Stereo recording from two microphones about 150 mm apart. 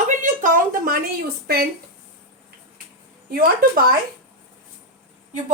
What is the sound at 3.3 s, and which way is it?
Speech, 75° right (ahead or behind).